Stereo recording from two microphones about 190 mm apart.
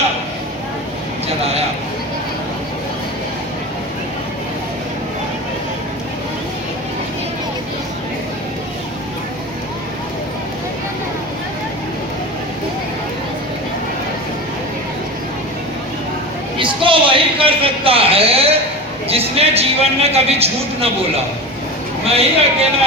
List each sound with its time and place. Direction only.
16.6 s a sound: 25° right (ahead or behind)
19.0 s a man's voice: 30° right (ahead or behind)
22.0 s a man's voice: 30° right (ahead or behind)